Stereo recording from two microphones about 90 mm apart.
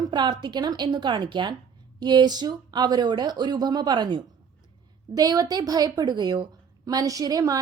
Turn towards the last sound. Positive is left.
turn(degrees=-45)  # may be behind; listen again after turning